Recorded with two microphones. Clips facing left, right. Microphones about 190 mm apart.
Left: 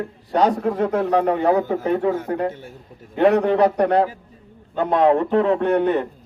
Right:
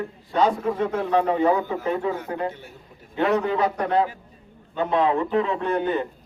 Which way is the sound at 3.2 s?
65° left (ahead or behind).